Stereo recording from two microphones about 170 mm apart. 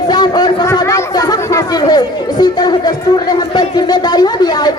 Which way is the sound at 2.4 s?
25° left (ahead or behind).